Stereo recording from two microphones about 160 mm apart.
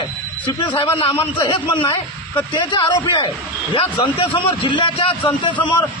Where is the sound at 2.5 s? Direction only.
30° left (ahead or behind).